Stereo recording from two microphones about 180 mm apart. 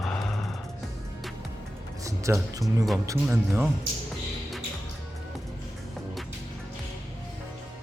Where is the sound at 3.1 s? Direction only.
15° right (ahead or behind).